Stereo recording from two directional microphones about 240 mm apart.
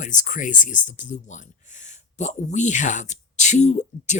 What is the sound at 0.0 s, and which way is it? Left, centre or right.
Speech, left.